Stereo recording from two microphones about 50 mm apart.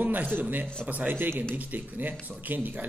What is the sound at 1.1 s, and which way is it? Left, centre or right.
Speech, right.